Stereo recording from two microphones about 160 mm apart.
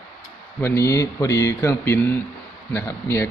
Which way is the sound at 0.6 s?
15° left (ahead or behind).